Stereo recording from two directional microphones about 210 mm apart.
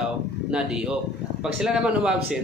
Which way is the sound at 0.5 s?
5° right (ahead or behind).